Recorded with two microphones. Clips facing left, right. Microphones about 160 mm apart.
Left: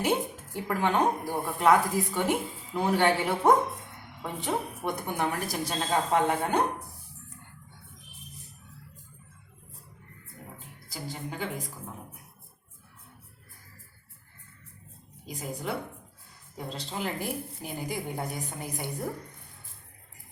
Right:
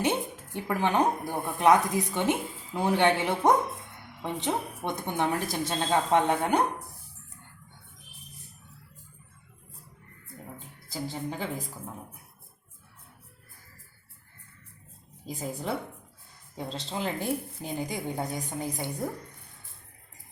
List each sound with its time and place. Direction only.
0.0 s a woman's voice: 20° right (ahead or behind)
10.9 s speech: 30° right (ahead or behind)
15.3 s speech: 30° right (ahead or behind)